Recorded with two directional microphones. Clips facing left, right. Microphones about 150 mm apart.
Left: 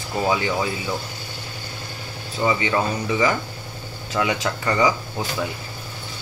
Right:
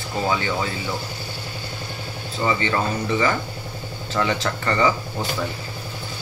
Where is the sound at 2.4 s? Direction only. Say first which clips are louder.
Left 1 dB; 10° left (ahead or behind).